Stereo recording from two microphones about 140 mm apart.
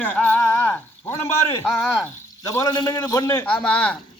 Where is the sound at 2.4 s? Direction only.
25° left (ahead or behind).